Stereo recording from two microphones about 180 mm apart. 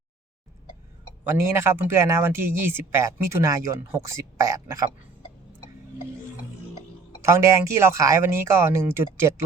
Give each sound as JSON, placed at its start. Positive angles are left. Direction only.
{"t": 1.2, "sound": "speech", "side_deg": -15}
{"t": 7.3, "sound": "speech", "side_deg": -15}